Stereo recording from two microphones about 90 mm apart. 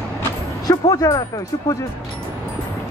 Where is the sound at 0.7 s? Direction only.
40° left (ahead or behind).